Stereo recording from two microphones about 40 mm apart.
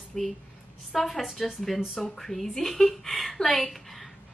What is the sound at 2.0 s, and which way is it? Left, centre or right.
Speech, centre.